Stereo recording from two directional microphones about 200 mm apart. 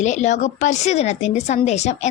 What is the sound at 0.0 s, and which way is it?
A woman's voice, 35° left (ahead or behind).